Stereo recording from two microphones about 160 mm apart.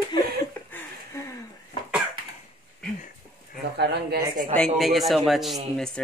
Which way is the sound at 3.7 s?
85° right.